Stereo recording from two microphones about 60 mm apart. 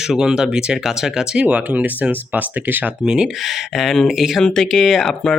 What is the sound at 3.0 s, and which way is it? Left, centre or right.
Speech, centre.